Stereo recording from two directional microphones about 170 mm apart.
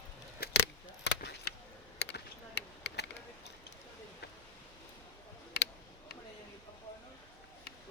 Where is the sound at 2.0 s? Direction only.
85° left.